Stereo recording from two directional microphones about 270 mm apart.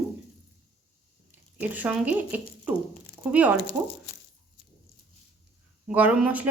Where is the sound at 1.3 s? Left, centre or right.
Centre.